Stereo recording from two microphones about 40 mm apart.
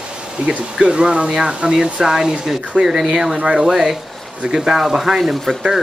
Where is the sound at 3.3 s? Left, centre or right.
Right.